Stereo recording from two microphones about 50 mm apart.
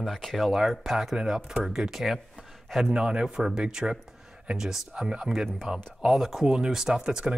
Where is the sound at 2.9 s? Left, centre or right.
Centre.